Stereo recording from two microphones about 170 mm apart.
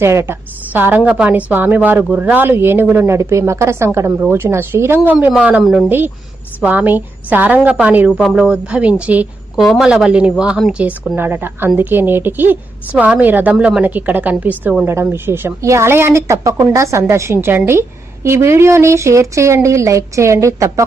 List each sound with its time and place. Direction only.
0.0 s a woman's voice: 15° right (ahead or behind)